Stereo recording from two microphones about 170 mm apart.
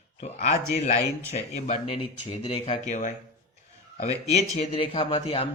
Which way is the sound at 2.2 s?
35° left (ahead or behind).